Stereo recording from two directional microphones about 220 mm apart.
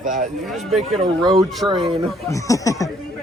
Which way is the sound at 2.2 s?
15° left (ahead or behind).